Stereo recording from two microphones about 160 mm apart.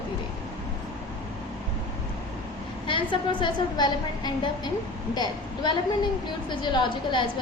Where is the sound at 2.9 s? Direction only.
30° left (ahead or behind).